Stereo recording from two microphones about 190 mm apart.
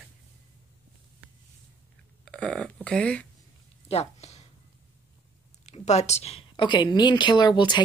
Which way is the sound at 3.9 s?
35° left (ahead or behind).